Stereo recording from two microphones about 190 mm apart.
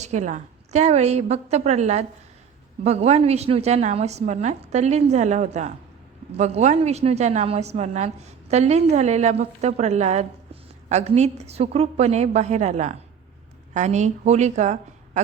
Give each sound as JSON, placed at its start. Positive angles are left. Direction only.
{"t": 0.0, "sound": "a woman's voice", "side_deg": -40}